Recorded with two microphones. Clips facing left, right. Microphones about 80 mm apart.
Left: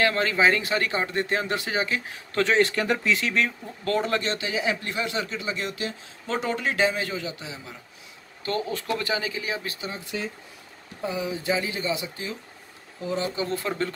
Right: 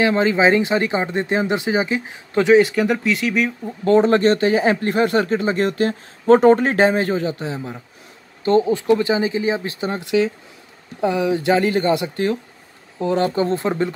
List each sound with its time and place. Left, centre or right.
0.0 s speech: centre
3.6 s speech: right
4.1 s speech: right
8.5 s speech: right
9.8 s speech: right
11.0 s speech: right
13.3 s speech: right
13.7 s speech: centre